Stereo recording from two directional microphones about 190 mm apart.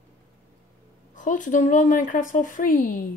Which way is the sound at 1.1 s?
40° left (ahead or behind).